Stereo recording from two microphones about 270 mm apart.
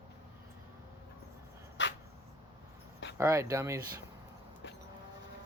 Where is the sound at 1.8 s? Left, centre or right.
Left.